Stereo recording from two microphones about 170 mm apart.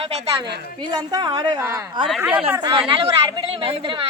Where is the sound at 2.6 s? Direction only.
30° right (ahead or behind).